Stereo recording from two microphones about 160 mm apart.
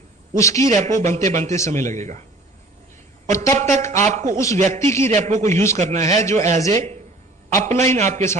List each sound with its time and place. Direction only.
0.3 s a man's voice: 20° left (ahead or behind)
0.7 s a man's voice: 50° right (ahead or behind)
3.3 s a man's voice: 20° left (ahead or behind)
3.8 s a man's voice: 50° right (ahead or behind)